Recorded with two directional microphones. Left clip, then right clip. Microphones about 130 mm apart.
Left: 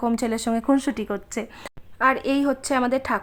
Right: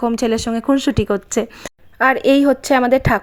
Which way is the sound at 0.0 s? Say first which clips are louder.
Right 6 dB; 25° right (ahead or behind).